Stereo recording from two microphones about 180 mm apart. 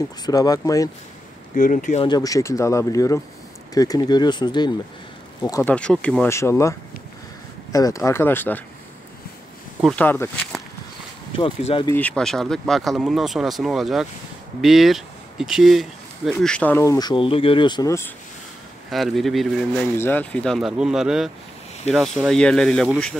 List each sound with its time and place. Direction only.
0.3 s speech: 20° left (ahead or behind)
1.5 s speech: 45° left (ahead or behind)
2.0 s speech: 20° left (ahead or behind)
5.4 s speech: 15° left (ahead or behind)
7.7 s speech: 15° left (ahead or behind)
9.9 s speech: 10° left (ahead or behind)
11.3 s speech: 30° left (ahead or behind)
11.9 s speech: 5° left (ahead or behind)
18.9 s speech: centre (ahead or behind)